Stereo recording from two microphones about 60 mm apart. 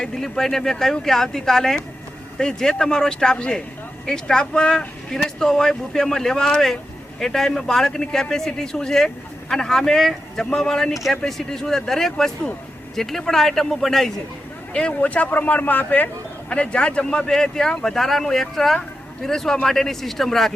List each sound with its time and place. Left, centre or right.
0.0 s a man's voice: centre
14.7 s a man's voice: centre